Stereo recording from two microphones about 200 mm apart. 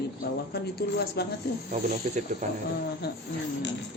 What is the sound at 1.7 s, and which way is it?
Speech, 40° right (ahead or behind).